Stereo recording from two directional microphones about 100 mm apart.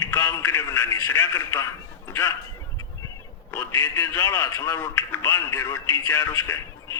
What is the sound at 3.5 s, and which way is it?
Speech, 20° left (ahead or behind).